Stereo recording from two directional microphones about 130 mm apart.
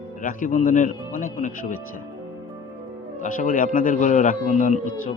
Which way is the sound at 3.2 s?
90° left.